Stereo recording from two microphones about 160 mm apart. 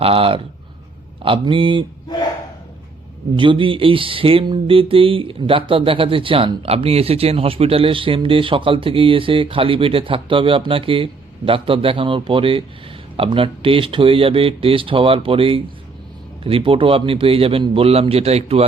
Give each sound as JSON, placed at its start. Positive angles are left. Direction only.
{"t": 0.0, "sound": "speech", "side_deg": -35}
{"t": 3.3, "sound": "speech", "side_deg": -30}